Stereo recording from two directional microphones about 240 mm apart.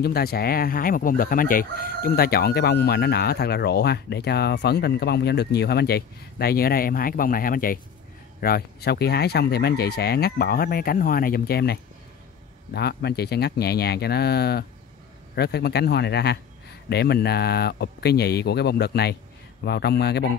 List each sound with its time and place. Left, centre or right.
0.0 s speech: left